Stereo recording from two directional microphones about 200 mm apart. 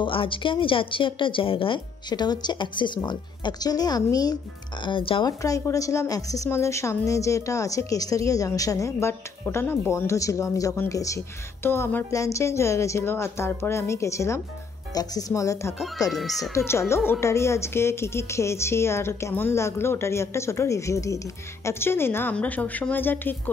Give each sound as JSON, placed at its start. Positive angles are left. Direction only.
{"t": 0.0, "sound": "a woman's voice", "side_deg": 25}
{"t": 16.1, "sound": "speech", "side_deg": 0}
{"t": 16.5, "sound": "a woman's voice", "side_deg": 15}